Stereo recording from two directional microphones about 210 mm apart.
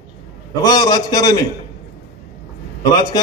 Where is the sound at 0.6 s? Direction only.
20° left (ahead or behind).